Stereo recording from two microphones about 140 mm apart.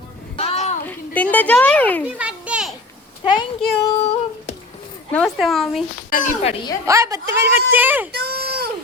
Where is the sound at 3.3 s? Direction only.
35° left (ahead or behind).